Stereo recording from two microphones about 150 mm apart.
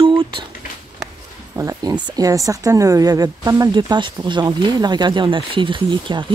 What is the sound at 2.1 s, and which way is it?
Speech, 25° right (ahead or behind).